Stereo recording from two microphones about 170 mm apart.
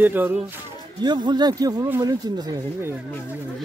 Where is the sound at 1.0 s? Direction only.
25° right (ahead or behind).